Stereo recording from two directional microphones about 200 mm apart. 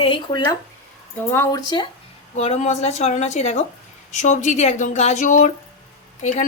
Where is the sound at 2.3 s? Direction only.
35° left (ahead or behind).